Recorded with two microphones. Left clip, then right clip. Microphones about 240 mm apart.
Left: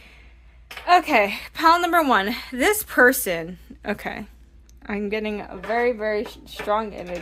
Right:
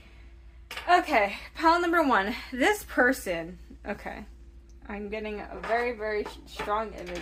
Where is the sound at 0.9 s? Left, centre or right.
Left.